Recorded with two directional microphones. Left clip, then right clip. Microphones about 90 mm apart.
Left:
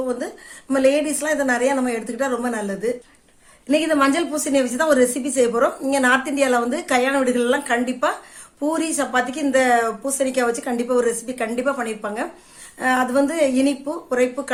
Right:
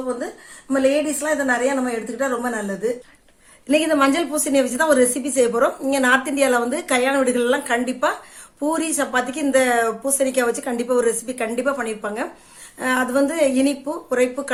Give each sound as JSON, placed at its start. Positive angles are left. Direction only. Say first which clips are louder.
{"t": 0.7, "sound": "a woman's voice", "louder": "left 1 dB", "side_deg": 30}
{"t": 3.7, "sound": "a woman's voice", "louder": "right 1 dB", "side_deg": 0}